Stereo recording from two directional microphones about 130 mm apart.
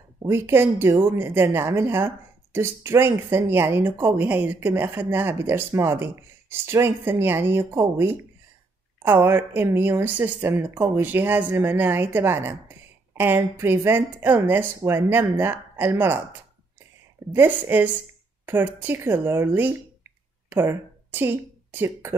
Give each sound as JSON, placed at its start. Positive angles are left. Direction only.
{"t": 0.2, "sound": "speech", "side_deg": -20}
{"t": 9.0, "sound": "speech", "side_deg": -15}
{"t": 17.3, "sound": "speech", "side_deg": -15}